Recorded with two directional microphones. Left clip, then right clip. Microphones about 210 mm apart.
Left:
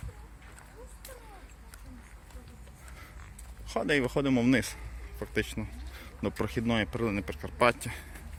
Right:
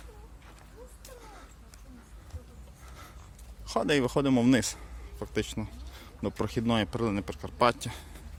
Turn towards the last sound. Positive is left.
turn(degrees=-15)  # may be behind; listen again after turning